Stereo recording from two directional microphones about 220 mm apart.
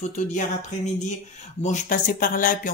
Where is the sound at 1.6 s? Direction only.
35° left (ahead or behind).